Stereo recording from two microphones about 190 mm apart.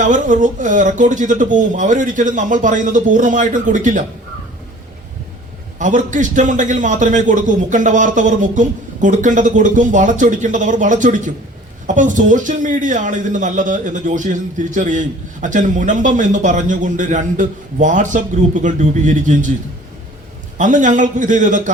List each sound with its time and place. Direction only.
0.0 s a man's voice: 40° right (ahead or behind)
5.8 s a man's voice: 40° right (ahead or behind)
20.6 s a man's voice: 40° right (ahead or behind)